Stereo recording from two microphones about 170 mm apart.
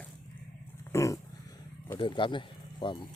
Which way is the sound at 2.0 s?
30° left (ahead or behind).